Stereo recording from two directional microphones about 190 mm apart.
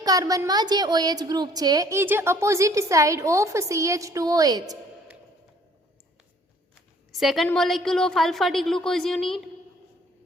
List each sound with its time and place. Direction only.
0.0 s a woman's voice: 20° right (ahead or behind)
7.1 s a woman's voice: centre (ahead or behind)